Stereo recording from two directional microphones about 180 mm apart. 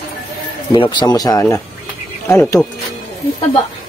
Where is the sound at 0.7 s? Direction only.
25° left (ahead or behind).